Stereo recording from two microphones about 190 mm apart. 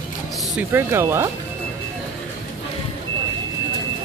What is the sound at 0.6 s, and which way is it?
Speech, 10° right (ahead or behind).